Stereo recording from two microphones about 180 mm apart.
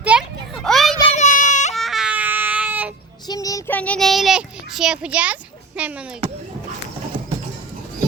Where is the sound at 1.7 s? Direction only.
Centre (ahead or behind).